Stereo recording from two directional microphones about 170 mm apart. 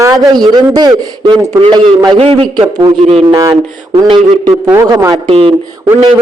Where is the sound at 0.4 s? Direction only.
25° right (ahead or behind).